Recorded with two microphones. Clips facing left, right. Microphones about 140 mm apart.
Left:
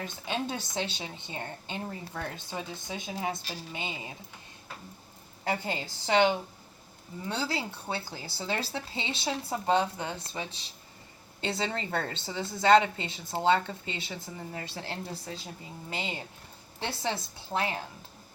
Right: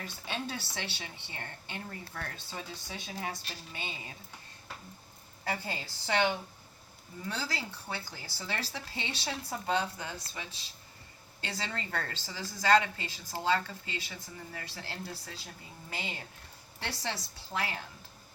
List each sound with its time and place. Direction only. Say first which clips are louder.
0.0 s a woman's voice: left 5 dB; 20° left (ahead or behind)
5.5 s a woman's voice: left 5 dB; 20° left (ahead or behind)
11.3 s a woman's voice: left 7 dB; 20° left (ahead or behind)
17.5 s a woman's voice: left 5 dB; 20° left (ahead or behind)